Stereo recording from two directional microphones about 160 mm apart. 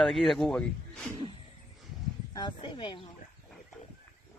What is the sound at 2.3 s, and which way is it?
Speech, 25° left (ahead or behind).